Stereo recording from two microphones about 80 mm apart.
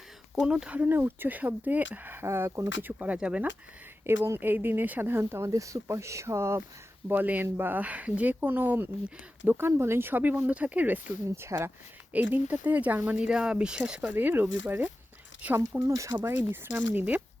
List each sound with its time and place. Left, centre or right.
0.4 s speech: centre
0.8 s speech: right
4.0 s speech: right
7.1 s speech: right
11.4 s speech: right
12.1 s speech: right
14.0 s speech: right
15.8 s speech: right
16.1 s speech: right